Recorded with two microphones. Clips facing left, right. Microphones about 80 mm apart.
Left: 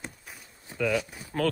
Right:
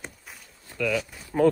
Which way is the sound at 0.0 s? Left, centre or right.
Centre.